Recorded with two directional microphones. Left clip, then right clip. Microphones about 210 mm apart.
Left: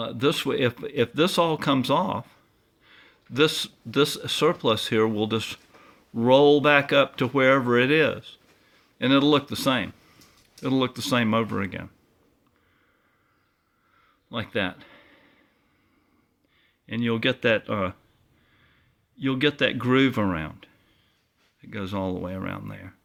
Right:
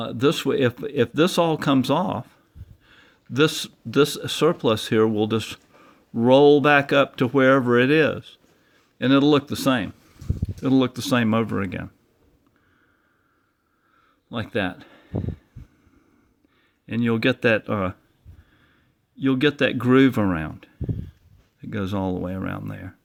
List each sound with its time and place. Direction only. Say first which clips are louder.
0.0 s speech: right 3 dB; 40° right (ahead or behind)
14.3 s speech: right 2 dB; 40° right (ahead or behind)
16.8 s speech: right 3 dB; 45° right (ahead or behind)
19.1 s speech: right 3 dB; 40° right (ahead or behind)